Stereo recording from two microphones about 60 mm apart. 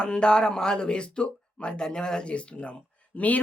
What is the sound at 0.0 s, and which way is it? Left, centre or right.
Speech, centre.